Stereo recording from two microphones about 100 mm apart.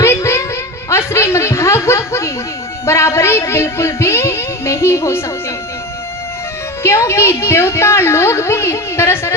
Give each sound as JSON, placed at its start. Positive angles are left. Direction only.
{"t": 0.0, "sound": "a sound", "side_deg": 25}
{"t": 0.9, "sound": "snicker", "side_deg": 25}
{"t": 2.8, "sound": "music", "side_deg": 25}
{"t": 6.8, "sound": "a woman's voice", "side_deg": 30}